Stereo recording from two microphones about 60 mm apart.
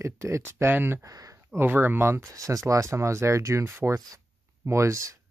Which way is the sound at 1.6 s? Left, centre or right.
Right.